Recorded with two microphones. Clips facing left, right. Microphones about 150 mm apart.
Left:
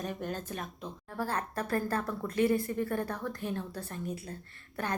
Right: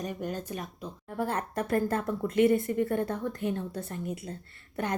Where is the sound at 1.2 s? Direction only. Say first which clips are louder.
Right 3 dB; 25° right (ahead or behind).